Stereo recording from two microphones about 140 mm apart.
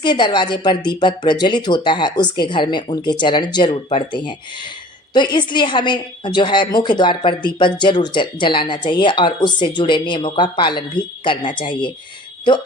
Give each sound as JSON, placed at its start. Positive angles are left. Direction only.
{"t": 0.0, "sound": "a woman's voice", "side_deg": 35}